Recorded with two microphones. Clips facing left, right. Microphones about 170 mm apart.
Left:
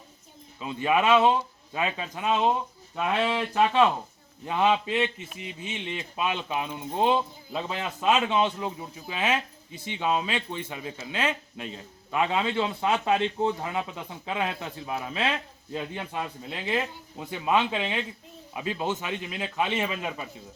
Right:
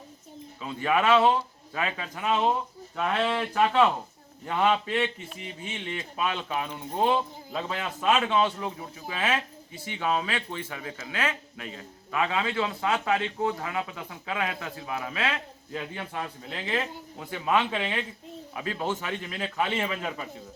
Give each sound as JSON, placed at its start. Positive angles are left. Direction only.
{"t": 0.6, "sound": "a man's voice", "side_deg": 15}
{"t": 2.9, "sound": "a man's voice", "side_deg": 10}
{"t": 4.4, "sound": "a man's voice", "side_deg": 10}